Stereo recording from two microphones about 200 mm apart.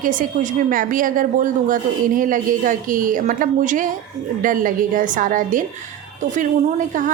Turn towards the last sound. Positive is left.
turn(degrees=-40)  # may be behind; listen again after turning